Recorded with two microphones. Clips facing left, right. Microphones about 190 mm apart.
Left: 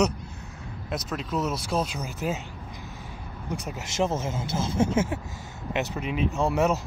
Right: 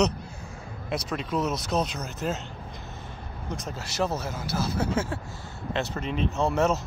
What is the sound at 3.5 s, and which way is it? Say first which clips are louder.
Speech: left 2 dB; 15° left (ahead or behind).